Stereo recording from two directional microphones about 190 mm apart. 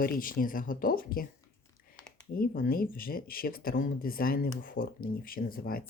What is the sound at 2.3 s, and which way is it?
Speech, 50° left (ahead or behind).